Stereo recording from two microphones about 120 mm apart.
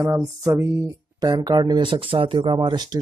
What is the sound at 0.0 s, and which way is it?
Speech, 25° right (ahead or behind).